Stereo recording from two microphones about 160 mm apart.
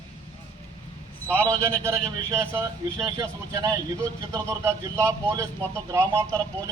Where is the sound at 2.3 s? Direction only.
15° right (ahead or behind).